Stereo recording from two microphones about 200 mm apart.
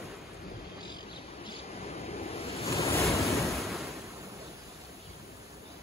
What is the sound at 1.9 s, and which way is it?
Waves, 30° left (ahead or behind).